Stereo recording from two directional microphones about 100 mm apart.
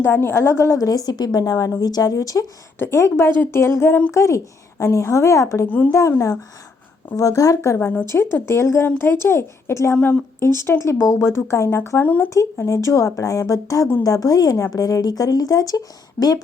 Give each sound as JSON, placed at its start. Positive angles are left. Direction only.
{"t": 0.0, "sound": "a woman's voice", "side_deg": 20}
{"t": 2.7, "sound": "a woman's voice", "side_deg": 25}
{"t": 7.8, "sound": "a woman's voice", "side_deg": 20}
{"t": 12.3, "sound": "a woman's voice", "side_deg": 30}